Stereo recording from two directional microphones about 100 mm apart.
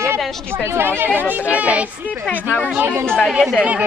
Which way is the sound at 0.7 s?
20° right (ahead or behind).